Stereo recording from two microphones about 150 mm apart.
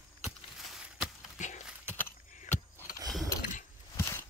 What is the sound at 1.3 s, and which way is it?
Horse, 55° left (ahead or behind).